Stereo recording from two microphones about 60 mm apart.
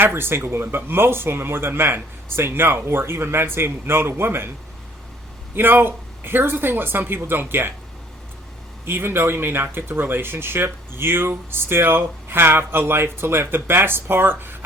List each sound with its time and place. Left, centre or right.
0.0 s speech: right
5.5 s speech: right
8.8 s speech: right